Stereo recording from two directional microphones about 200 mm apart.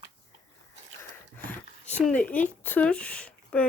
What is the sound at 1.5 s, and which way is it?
Speech, 5° left (ahead or behind).